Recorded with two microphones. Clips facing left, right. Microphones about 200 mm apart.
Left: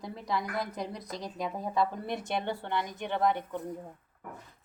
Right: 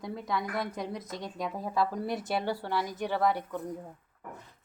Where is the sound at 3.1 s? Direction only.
20° left (ahead or behind).